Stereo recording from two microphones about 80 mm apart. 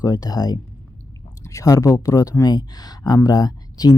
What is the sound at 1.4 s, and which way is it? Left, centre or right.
Speech, left.